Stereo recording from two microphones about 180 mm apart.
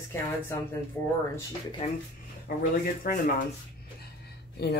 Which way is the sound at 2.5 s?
55° left (ahead or behind).